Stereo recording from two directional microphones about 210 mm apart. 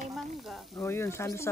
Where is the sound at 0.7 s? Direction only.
10° left (ahead or behind).